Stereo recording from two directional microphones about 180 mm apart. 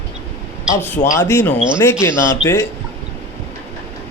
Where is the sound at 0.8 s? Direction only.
10° left (ahead or behind).